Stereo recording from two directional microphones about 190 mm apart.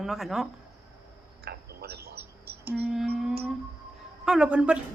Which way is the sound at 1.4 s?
55° right (ahead or behind).